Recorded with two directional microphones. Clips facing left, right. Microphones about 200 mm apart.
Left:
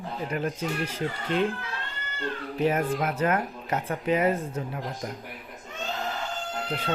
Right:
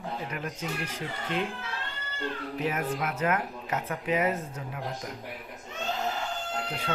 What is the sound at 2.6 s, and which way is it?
Speech, 35° left (ahead or behind).